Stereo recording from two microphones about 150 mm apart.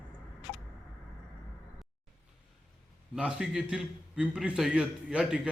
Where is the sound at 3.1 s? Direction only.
5° right (ahead or behind).